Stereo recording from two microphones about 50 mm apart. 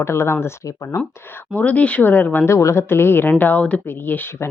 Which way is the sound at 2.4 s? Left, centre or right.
Left.